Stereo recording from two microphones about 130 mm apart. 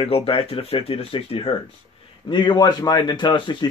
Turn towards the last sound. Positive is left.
turn(degrees=35)  # may be behind; listen again after turning